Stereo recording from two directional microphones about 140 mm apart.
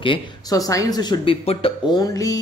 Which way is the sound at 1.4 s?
40° left (ahead or behind).